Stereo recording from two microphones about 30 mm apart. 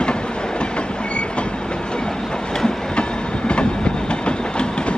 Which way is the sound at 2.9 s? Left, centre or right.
Left.